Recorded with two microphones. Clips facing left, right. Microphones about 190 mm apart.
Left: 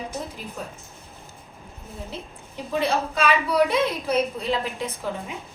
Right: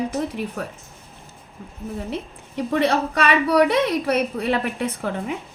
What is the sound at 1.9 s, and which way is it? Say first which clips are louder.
A woman's voice: right 6 dB; 70° right (ahead or behind).